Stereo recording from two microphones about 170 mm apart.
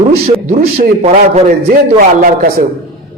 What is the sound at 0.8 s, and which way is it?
Speech, 45° right (ahead or behind).